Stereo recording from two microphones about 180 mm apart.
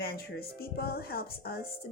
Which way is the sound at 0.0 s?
60° left (ahead or behind).